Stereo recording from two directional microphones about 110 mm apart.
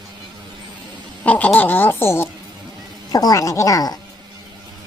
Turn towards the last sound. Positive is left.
turn(degrees=35)  # may be behind; listen again after turning